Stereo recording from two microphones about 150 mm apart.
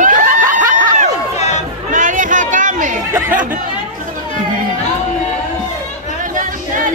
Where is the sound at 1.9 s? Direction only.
60° right (ahead or behind).